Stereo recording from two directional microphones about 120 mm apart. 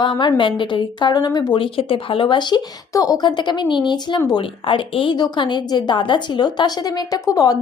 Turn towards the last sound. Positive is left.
turn(degrees=30)  # may be behind; listen again after turning